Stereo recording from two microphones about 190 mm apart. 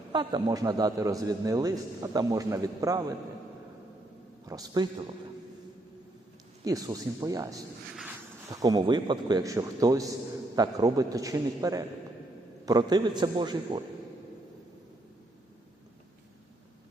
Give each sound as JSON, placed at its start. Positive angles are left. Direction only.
{"t": 0.1, "sound": "a man's voice", "side_deg": -25}
{"t": 4.4, "sound": "a man's voice", "side_deg": -20}
{"t": 6.7, "sound": "a man's voice", "side_deg": -20}